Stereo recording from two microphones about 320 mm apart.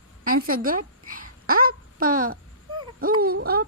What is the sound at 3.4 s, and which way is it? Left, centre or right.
Speech, right.